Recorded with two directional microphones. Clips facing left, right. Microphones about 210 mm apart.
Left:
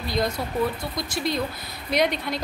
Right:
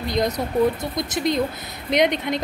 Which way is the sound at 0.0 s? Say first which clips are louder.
Right 3 dB; 20° right (ahead or behind).